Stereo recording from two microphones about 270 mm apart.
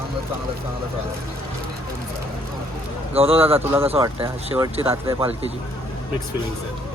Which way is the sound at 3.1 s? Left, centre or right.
Right.